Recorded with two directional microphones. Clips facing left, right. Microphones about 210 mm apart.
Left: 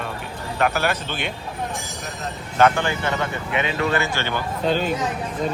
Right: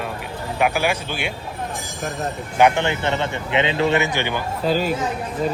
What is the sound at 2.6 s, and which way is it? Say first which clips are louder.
Speech: right 1 dB; 20° right (ahead or behind).